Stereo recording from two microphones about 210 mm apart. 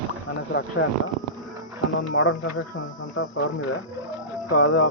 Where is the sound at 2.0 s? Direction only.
65° left (ahead or behind).